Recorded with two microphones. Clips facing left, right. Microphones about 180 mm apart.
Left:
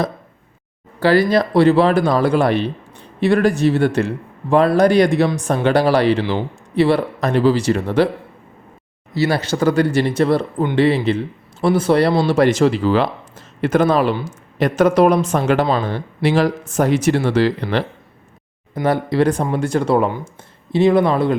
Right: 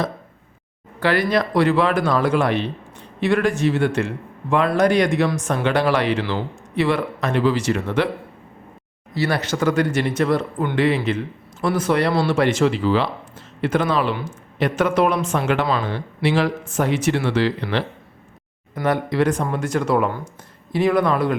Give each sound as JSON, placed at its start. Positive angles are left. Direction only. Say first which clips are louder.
{"t": 0.9, "sound": "speech", "louder": "left 5 dB", "side_deg": 30}
{"t": 9.1, "sound": "speech", "louder": "left 4 dB", "side_deg": 25}
{"t": 18.7, "sound": "speech", "louder": "left 3 dB", "side_deg": 30}